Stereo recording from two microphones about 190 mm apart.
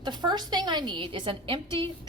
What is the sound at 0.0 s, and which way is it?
A woman's voice, 25° right (ahead or behind).